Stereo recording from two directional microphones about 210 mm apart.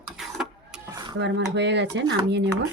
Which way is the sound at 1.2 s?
55° right (ahead or behind).